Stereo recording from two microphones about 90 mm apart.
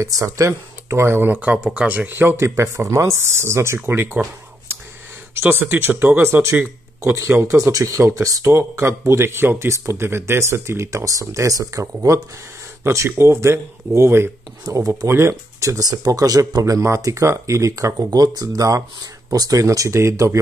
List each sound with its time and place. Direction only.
0.0 s speech: 35° right (ahead or behind)
5.3 s speech: 25° right (ahead or behind)